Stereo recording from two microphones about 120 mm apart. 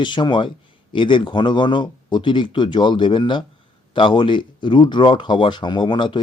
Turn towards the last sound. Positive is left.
turn(degrees=40)  # may be behind; listen again after turning